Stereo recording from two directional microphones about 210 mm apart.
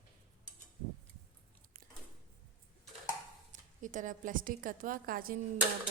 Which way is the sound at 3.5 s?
40° right (ahead or behind).